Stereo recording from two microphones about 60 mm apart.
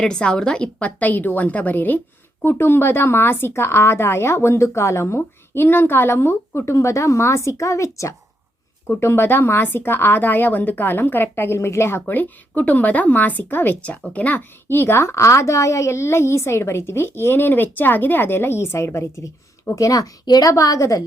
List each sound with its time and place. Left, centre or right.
0.0 s a woman's voice: centre; by 8.1 s left
9.0 s speech: left
12.1 s a woman's voice: left
14.7 s speech: left
19.7 s speech: left